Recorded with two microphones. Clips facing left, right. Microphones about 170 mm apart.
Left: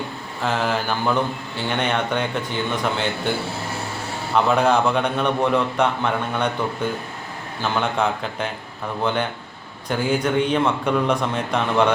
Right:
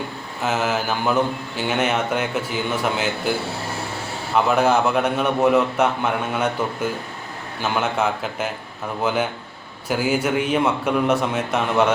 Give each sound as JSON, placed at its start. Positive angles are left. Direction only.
{"t": 0.4, "sound": "a man's voice", "side_deg": -5}
{"t": 4.4, "sound": "a man's voice", "side_deg": -5}
{"t": 7.6, "sound": "a man's voice", "side_deg": -5}